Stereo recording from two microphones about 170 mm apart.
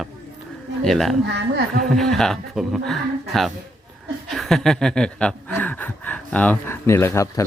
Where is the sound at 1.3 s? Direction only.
75° right (ahead or behind).